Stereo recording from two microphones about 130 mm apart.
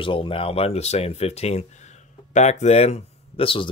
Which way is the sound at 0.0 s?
40° left (ahead or behind).